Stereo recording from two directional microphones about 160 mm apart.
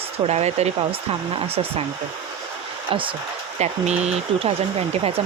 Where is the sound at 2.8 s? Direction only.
35° right (ahead or behind).